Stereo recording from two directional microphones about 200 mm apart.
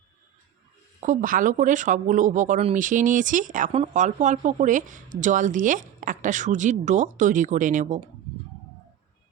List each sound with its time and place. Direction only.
1.0 s speech: 40° right (ahead or behind)